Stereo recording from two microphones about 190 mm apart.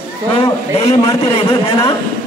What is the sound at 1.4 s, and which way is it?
Speech, 30° left (ahead or behind).